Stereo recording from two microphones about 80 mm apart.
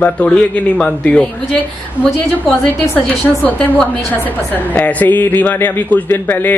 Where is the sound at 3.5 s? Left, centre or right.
Centre.